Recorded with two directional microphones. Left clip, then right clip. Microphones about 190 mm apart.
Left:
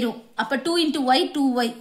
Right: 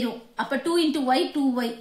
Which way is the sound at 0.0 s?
30° left (ahead or behind).